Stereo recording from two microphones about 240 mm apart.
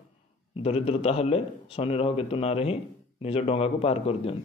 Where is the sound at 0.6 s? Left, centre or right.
Left.